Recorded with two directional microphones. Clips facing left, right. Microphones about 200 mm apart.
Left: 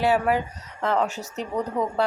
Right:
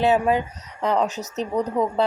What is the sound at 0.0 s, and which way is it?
Speech, 20° right (ahead or behind).